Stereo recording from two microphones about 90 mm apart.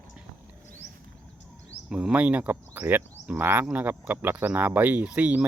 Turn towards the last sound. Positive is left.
turn(degrees=-15)  # may be behind; listen again after turning